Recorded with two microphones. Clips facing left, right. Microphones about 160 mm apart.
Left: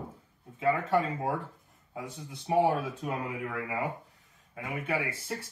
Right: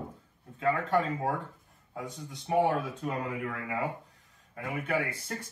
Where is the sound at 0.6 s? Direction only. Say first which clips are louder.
Left 1 dB; 5° left (ahead or behind).